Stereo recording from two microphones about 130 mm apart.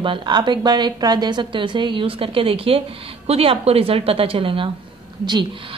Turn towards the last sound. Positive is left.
turn(degrees=-35)  # may be behind; listen again after turning